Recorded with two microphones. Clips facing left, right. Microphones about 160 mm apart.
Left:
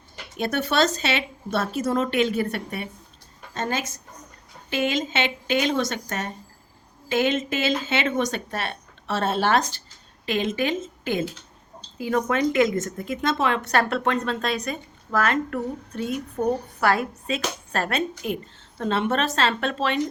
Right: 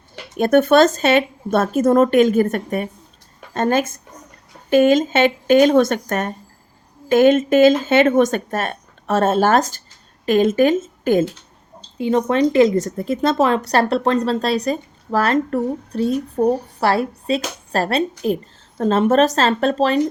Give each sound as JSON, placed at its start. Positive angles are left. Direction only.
{"t": 0.3, "sound": "speech", "side_deg": -50}
{"t": 11.9, "sound": "a woman's voice", "side_deg": -25}